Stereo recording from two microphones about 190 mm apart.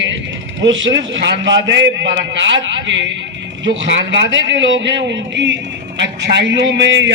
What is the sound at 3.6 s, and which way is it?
A man's voice, 70° right (ahead or behind).